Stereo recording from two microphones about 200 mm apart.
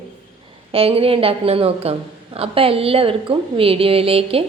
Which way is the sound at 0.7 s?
30° right (ahead or behind).